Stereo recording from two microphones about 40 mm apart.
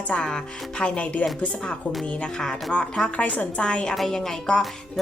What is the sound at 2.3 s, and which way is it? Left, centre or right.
A woman's voice, centre.